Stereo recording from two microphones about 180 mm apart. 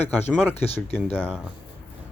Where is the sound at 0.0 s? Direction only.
10° left (ahead or behind).